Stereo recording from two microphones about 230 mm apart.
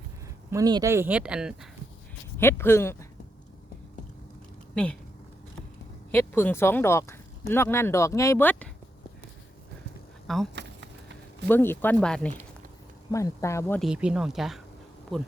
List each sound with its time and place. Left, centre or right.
0.5 s speech: centre
2.4 s speech: centre
4.7 s speech: centre
6.1 s speech: centre
10.2 s speech: centre
10.5 s a sound: right
11.4 s speech: centre
13.8 s speech: centre